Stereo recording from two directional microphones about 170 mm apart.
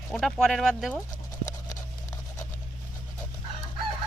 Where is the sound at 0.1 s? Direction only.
5° left (ahead or behind).